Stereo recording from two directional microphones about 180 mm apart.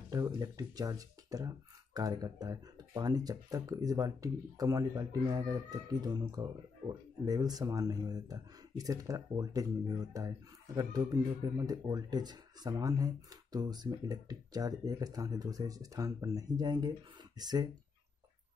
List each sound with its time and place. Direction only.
0.1 s speech: 20° right (ahead or behind)